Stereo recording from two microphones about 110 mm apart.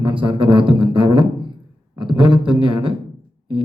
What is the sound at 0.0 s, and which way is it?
Speech, 50° right (ahead or behind).